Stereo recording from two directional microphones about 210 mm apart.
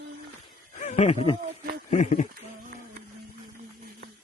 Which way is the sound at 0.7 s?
35° left (ahead or behind).